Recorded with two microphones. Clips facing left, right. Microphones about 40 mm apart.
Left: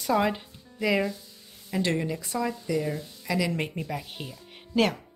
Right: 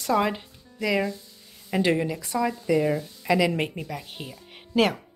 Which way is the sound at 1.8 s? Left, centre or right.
Centre.